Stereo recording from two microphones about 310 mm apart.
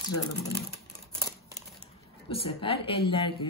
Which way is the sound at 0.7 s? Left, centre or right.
Centre.